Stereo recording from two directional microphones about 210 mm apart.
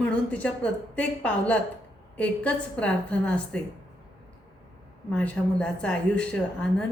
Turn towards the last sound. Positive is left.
turn(degrees=5)  # may be behind; listen again after turning